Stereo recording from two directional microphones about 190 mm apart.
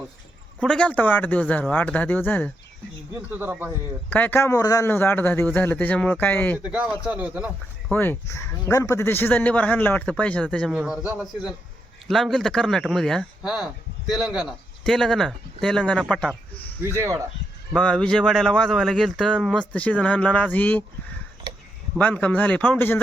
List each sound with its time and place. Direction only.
0.6 s speech: 5° left (ahead or behind)
3.1 s speech: 10° right (ahead or behind)
4.1 s speech: 10° left (ahead or behind)
6.7 s speech: 5° right (ahead or behind)
7.9 s speech: 10° left (ahead or behind)
10.7 s speech: 5° right (ahead or behind)
16.9 s speech: 15° right (ahead or behind)
17.7 s speech: 5° left (ahead or behind)
21.9 s speech: 5° left (ahead or behind)